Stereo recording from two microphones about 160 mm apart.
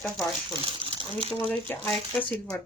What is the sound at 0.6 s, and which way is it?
Crumpling, 35° right (ahead or behind).